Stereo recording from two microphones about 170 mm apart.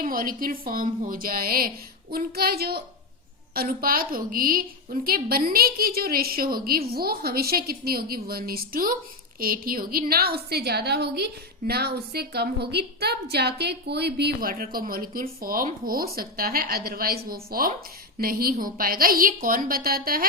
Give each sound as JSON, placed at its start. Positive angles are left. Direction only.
{"t": 0.0, "sound": "a woman's voice", "side_deg": -55}